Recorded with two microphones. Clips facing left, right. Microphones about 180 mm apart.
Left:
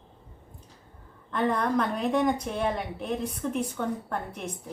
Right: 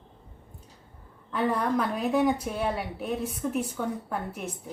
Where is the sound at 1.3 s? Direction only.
5° right (ahead or behind).